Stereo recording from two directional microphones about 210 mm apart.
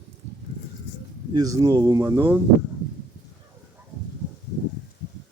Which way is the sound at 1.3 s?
15° right (ahead or behind).